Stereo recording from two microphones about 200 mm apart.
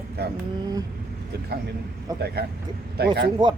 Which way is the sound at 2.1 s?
20° right (ahead or behind).